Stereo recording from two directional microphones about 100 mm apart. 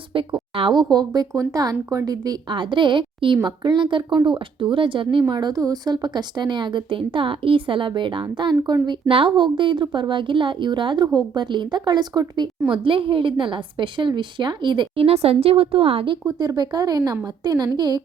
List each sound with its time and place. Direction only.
0.3 s speech: 60° right (ahead or behind); by 2.6 s 40° right (ahead or behind)
2.6 s a woman's voice: 55° right (ahead or behind)
5.3 s speech: 45° right (ahead or behind)
12.4 s a woman's voice: 55° right (ahead or behind)
15.0 s speech: 85° right
16.2 s speech: 40° right (ahead or behind)